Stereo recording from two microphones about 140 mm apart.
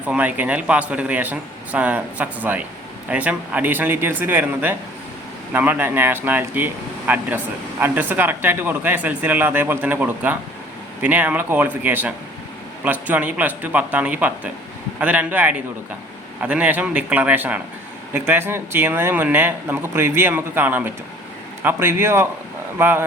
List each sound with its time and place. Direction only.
0.0 s speech: 10° right (ahead or behind)